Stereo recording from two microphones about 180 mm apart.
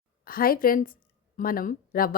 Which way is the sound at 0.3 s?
55° left (ahead or behind).